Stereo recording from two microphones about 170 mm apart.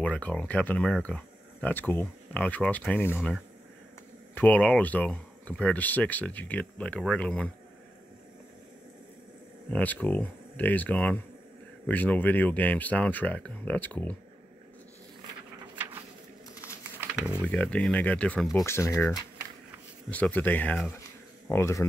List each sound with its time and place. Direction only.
0.0 s speech: 10° left (ahead or behind)
4.4 s speech: 10° left (ahead or behind)
9.7 s speech: 10° left (ahead or behind)
17.5 s speech: 5° left (ahead or behind)
18.7 s speech: 15° left (ahead or behind)
21.0 s a sound: 15° left (ahead or behind)